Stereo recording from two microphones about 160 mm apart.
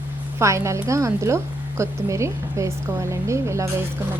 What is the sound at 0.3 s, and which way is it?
Speech, 20° right (ahead or behind).